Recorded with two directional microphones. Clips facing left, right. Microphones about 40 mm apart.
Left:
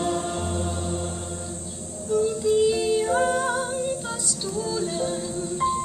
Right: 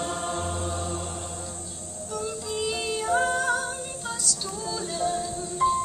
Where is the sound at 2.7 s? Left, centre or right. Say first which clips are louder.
Left 5 dB; centre.